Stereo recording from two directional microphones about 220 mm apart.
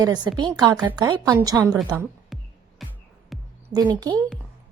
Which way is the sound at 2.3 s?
Centre (ahead or behind).